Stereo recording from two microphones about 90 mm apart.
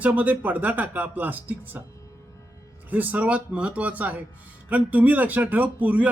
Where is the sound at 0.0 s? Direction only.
15° right (ahead or behind).